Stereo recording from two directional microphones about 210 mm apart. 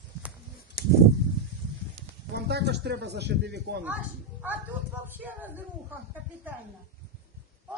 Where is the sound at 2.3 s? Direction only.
50° right (ahead or behind).